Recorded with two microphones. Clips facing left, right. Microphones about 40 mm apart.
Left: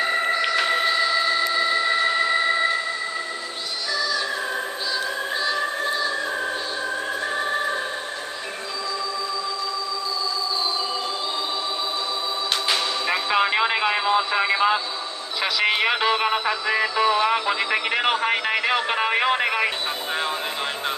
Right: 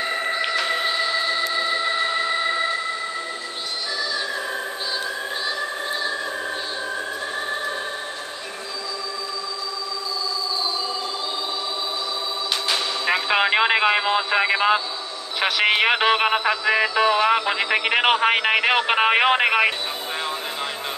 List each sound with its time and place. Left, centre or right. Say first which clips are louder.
0.3 s music: left 2 dB; centre
0.6 s music: left 2 dB; centre
0.8 s a sound: left 2 dB; centre
13.3 s a sound: right 2 dB; right
15.4 s a man's voice: right 2 dB; right
17.9 s a man's voice: right 5 dB; right